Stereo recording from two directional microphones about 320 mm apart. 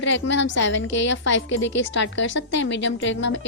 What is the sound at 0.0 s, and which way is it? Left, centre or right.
A woman's voice, left.